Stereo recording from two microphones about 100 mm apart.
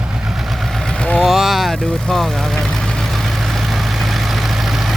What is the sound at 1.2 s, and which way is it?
Vehicle, 5° right (ahead or behind).